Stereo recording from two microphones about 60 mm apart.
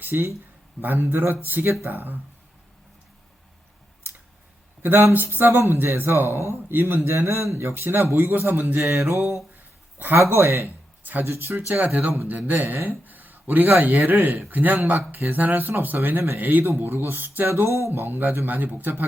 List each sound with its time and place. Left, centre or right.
0.1 s speech: right
4.8 s speech: right
7.7 s speech: right
8.8 s mantra: right
10.0 s speech: right
10.3 s mantra: right
11.0 s speech: right
11.7 s speech: right
17.5 s speech: right